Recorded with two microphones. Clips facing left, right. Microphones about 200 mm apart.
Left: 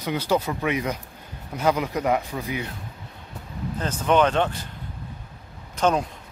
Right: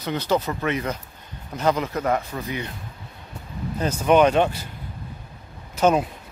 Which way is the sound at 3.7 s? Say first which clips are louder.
Right 3 dB; 10° right (ahead or behind).